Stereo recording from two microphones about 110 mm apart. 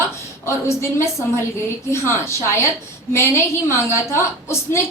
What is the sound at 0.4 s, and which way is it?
A woman's voice, 25° left (ahead or behind).